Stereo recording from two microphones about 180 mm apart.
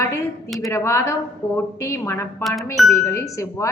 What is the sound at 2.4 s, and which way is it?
Speech, centre (ahead or behind).